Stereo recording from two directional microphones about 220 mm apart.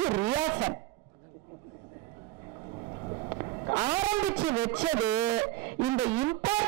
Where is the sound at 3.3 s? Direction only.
20° right (ahead or behind).